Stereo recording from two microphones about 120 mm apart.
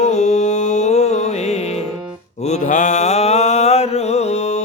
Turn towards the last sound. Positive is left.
turn(degrees=65)  # may be behind; listen again after turning